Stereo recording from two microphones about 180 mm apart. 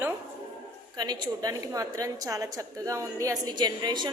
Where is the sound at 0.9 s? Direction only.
25° right (ahead or behind).